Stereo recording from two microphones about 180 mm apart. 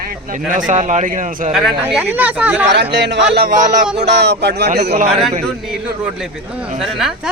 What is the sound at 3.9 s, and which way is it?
Speech, 70° right (ahead or behind).